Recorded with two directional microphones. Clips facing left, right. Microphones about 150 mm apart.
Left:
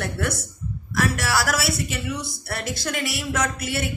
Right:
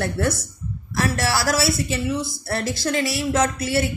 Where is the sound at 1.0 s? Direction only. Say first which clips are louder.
Right 1 dB; 35° right (ahead or behind).